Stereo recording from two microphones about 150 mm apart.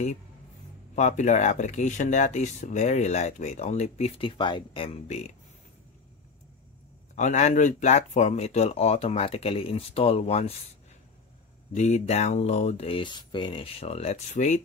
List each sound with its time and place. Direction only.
0.9 s speech: 50° left (ahead or behind)
4.3 s speech: 30° left (ahead or behind)
7.2 s speech: 50° left (ahead or behind)
11.7 s speech: 50° left (ahead or behind)